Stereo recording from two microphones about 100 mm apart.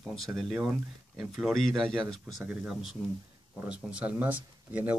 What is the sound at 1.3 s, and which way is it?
Speech, centre (ahead or behind).